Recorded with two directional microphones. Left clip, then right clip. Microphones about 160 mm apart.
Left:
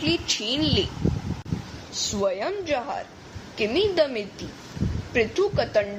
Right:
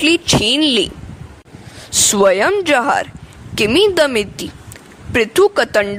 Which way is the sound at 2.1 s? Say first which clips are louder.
Right 14 dB; 80° right.